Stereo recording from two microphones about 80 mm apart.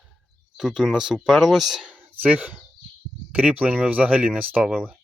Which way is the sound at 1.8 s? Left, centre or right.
Right.